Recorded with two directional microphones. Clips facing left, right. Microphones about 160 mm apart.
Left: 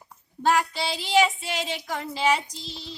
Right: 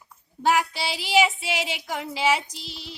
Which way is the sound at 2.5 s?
70° right (ahead or behind).